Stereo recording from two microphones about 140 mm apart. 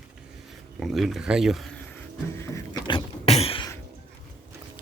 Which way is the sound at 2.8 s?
40° left (ahead or behind).